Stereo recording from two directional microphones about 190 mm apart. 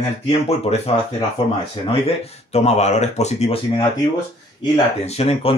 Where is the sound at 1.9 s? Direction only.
30° left (ahead or behind).